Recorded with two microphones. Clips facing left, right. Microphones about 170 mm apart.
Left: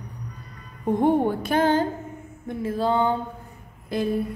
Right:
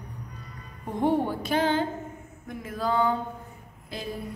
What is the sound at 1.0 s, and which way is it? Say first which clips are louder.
Speech: left 3 dB; 50° left (ahead or behind).